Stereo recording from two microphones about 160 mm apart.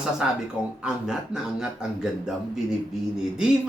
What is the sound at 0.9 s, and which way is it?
Speech, 5° right (ahead or behind).